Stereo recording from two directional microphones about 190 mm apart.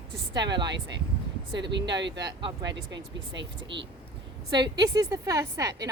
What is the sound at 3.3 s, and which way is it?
Speech, 70° right (ahead or behind).